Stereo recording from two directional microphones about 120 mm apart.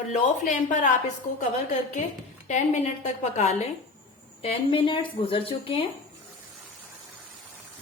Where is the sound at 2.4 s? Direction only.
80° left.